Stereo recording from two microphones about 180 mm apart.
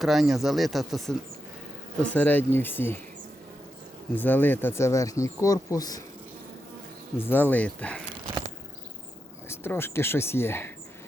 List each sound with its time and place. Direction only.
0.0 s speech: centre (ahead or behind)
4.1 s speech: 10° left (ahead or behind)
7.2 s speech: 10° left (ahead or behind)
9.5 s speech: 15° left (ahead or behind)